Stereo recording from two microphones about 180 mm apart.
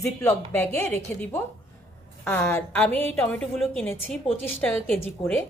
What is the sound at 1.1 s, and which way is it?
A woman's voice, 10° left (ahead or behind).